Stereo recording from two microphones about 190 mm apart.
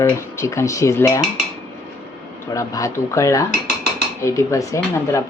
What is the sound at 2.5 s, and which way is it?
Speech, 15° left (ahead or behind).